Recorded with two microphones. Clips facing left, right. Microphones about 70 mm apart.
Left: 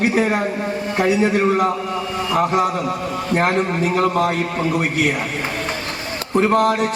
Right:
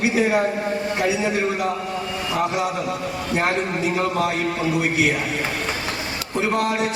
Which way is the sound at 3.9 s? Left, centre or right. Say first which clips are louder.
Left 5 dB; left.